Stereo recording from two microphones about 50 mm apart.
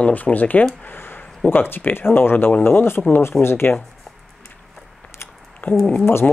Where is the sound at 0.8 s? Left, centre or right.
Left.